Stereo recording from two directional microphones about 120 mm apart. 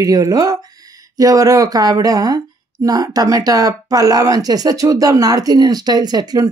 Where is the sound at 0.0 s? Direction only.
30° right (ahead or behind).